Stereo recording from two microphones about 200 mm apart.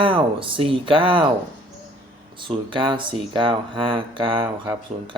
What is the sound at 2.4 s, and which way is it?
Speech, 25° right (ahead or behind).